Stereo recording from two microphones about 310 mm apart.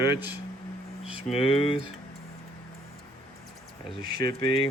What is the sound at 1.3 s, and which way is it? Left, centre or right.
Speech, centre.